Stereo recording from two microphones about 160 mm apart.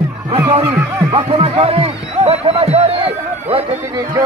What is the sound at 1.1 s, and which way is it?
Speech, 35° right (ahead or behind).